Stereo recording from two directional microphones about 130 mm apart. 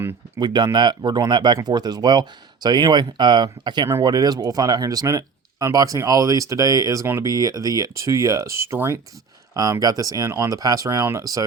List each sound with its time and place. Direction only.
0.3 s speech: 35° right (ahead or behind)